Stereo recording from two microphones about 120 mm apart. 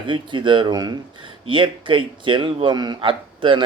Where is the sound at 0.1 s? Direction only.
40° right (ahead or behind).